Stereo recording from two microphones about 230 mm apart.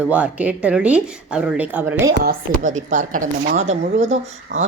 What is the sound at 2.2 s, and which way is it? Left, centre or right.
Speech, right.